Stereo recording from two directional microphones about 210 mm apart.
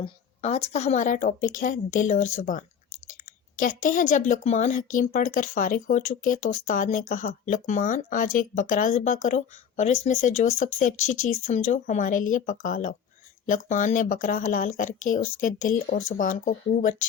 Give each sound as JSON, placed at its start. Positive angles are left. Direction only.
{"t": 0.0, "sound": "speech", "side_deg": 30}
{"t": 3.8, "sound": "speech", "side_deg": 40}